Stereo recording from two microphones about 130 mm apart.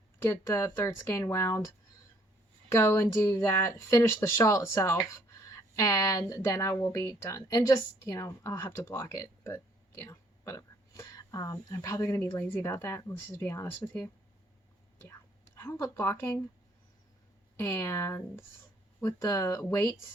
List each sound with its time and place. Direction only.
0.3 s a woman's voice: 20° left (ahead or behind)
2.7 s a woman's voice: 20° left (ahead or behind)
15.5 s a woman's voice: 20° left (ahead or behind)
17.6 s a woman's voice: 20° left (ahead or behind)